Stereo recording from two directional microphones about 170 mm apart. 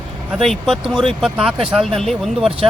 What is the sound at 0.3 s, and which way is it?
Speech, centre (ahead or behind).